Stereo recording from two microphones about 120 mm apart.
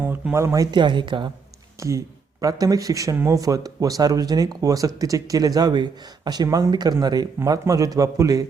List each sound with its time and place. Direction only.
0.0 s speech: 15° right (ahead or behind); by 1.3 s 40° right (ahead or behind)
1.8 s a man's voice: 25° right (ahead or behind)